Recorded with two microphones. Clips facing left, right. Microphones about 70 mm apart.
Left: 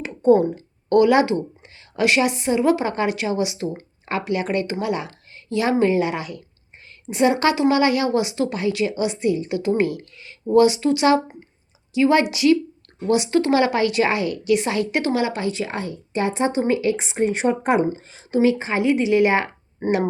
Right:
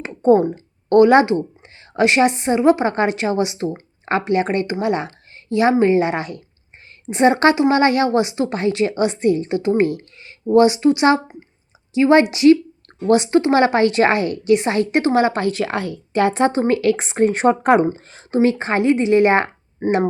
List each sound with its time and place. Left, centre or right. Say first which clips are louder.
0.0 s a sound: right 2 dB; right
0.9 s a woman's voice: right 4 dB; right
4.6 s speech: right 3 dB; right
4.9 s a woman's voice: right 4 dB; right
7.5 s speech: right 2 dB; right
7.8 s a woman's voice: right 3 dB; right
8.5 s a woman's voice: right 6 dB; right
15.4 s speech: right 5 dB; right
16.5 s a woman's voice: right 3 dB; right